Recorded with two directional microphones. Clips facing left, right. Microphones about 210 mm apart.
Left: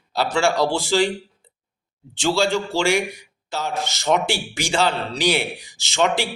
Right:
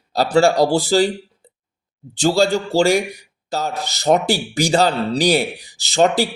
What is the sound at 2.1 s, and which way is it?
Speech, 40° right (ahead or behind).